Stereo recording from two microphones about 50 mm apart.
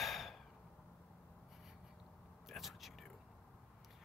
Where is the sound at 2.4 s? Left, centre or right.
Centre.